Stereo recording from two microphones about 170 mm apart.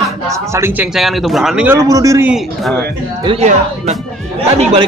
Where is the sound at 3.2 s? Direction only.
40° right (ahead or behind).